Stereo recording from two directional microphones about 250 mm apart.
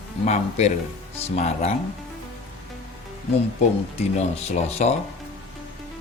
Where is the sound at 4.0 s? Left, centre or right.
Left.